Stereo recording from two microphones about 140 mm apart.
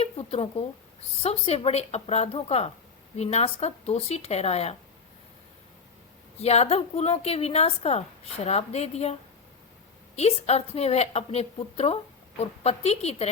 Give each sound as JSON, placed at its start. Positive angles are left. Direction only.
{"t": 0.0, "sound": "a woman's voice", "side_deg": 45}
{"t": 6.4, "sound": "a woman's voice", "side_deg": 50}
{"t": 10.2, "sound": "a woman's voice", "side_deg": 50}